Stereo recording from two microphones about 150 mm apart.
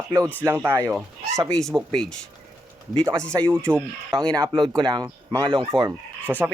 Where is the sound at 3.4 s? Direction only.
10° left (ahead or behind).